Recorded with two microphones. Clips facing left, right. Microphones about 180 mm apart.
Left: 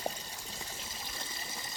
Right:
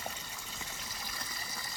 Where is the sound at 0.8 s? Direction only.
25° left (ahead or behind).